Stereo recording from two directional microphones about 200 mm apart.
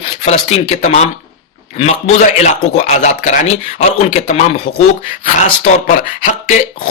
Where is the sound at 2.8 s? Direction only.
35° left (ahead or behind).